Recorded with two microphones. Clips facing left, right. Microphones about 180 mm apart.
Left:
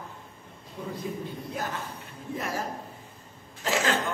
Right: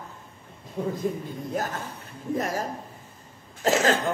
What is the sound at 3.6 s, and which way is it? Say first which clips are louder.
Speech: right 5 dB; 40° right (ahead or behind).